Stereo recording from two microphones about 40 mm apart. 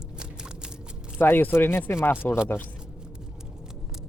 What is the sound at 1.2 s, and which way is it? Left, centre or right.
Speech, left.